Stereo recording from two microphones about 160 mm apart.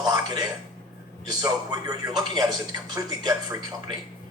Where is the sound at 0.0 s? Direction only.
25° right (ahead or behind).